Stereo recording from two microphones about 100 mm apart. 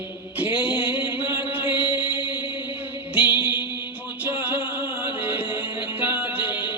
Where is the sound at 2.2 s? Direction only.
55° left (ahead or behind).